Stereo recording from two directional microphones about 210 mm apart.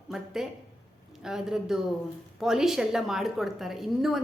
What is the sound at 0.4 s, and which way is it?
A woman's voice, centre (ahead or behind).